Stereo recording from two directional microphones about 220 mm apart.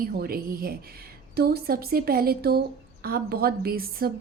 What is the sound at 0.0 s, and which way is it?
A woman's voice, 45° right (ahead or behind).